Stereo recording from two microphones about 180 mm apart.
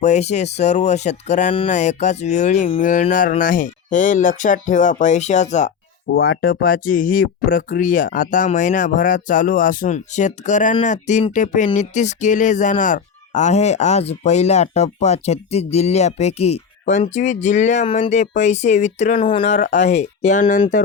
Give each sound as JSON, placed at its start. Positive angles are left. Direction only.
{"t": 0.0, "sound": "music", "side_deg": 40}
{"t": 2.8, "sound": "speech", "side_deg": 45}
{"t": 6.1, "sound": "speech", "side_deg": 80}
{"t": 6.4, "sound": "speech", "side_deg": 50}
{"t": 10.8, "sound": "music", "side_deg": 40}
{"t": 19.5, "sound": "speech", "side_deg": 40}